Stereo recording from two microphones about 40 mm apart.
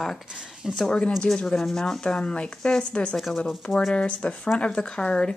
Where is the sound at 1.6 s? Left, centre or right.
Centre.